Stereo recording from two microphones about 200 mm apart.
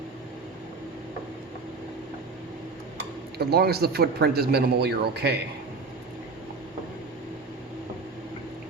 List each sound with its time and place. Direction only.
3.3 s a man's voice: 50° right (ahead or behind)